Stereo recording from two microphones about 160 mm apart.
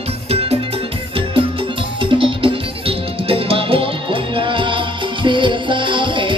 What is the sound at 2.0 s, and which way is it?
Music, 30° right (ahead or behind).